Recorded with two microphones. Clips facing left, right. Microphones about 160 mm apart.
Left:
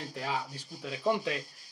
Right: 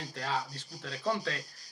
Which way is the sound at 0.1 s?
15° left (ahead or behind).